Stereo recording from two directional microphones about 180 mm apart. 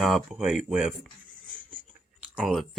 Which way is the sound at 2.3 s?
5° right (ahead or behind).